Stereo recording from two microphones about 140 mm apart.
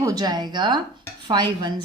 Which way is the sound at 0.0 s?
25° right (ahead or behind).